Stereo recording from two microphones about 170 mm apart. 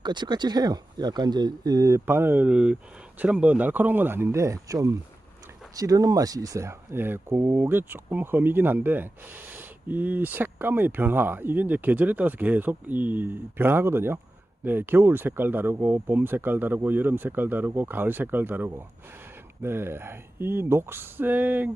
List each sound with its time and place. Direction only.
0.0 s speech: 25° right (ahead or behind); by 21.7 s 10° right (ahead or behind)